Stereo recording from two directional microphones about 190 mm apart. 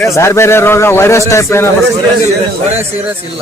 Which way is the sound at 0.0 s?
15° left (ahead or behind).